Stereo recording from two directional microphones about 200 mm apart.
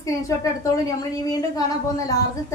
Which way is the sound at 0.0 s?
15° left (ahead or behind).